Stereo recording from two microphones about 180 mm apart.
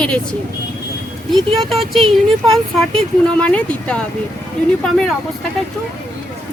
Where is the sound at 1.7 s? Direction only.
Centre (ahead or behind).